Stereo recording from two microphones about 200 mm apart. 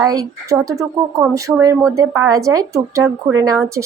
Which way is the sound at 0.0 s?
15° right (ahead or behind).